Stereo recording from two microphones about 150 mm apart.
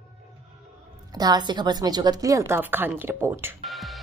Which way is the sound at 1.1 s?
25° right (ahead or behind).